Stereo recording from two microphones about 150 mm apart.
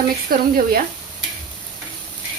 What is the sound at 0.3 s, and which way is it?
Speech, 75° right (ahead or behind).